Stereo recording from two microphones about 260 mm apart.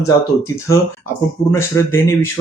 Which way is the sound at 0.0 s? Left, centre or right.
Centre.